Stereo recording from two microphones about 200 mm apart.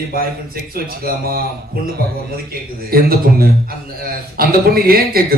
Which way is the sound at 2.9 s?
50° right (ahead or behind).